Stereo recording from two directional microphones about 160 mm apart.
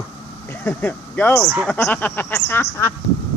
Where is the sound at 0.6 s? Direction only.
10° left (ahead or behind).